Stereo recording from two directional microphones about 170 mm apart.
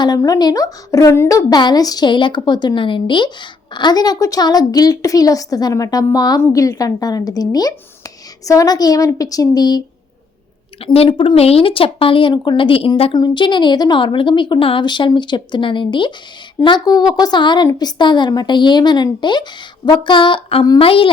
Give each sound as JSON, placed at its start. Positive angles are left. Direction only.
{"t": 0.0, "sound": "a woman's voice", "side_deg": 20}
{"t": 10.8, "sound": "a woman's voice", "side_deg": 35}